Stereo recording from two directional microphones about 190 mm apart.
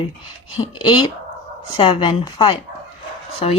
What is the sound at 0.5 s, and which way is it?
Speech, 25° left (ahead or behind).